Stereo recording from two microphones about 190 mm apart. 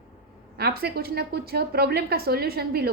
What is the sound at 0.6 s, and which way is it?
A woman's voice, 55° right (ahead or behind).